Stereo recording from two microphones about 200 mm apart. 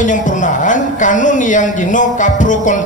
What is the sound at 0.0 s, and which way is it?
A woman's voice, 40° left (ahead or behind).